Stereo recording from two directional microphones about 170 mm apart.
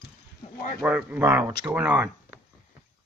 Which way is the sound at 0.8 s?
10° right (ahead or behind).